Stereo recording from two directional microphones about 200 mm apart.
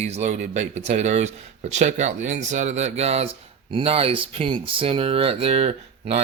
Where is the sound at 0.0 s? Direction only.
35° right (ahead or behind).